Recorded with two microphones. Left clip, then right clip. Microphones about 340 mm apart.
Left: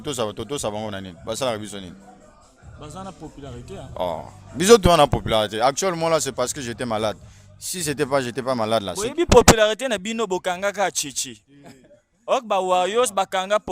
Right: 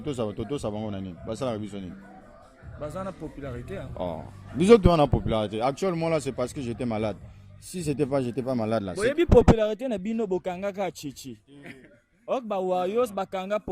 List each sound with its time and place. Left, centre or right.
0.0 s speech: left
2.8 s speech: centre
3.9 s speech: left
9.3 s speech: left